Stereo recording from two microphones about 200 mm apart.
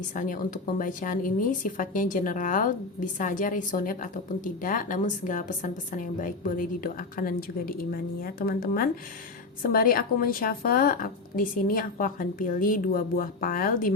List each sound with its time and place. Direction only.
0.1 s a woman's voice: 40° left (ahead or behind)